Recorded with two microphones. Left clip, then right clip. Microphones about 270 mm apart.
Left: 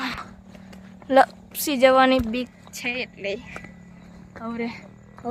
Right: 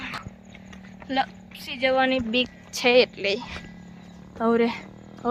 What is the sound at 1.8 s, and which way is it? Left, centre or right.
Speech, centre.